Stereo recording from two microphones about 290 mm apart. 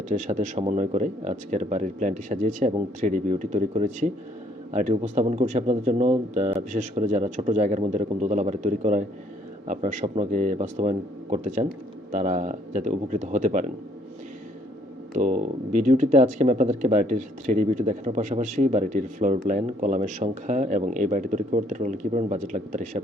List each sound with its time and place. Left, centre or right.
0.1 s speech: right
15.1 s speech: right